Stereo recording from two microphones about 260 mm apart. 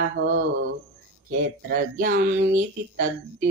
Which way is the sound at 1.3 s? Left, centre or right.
Right.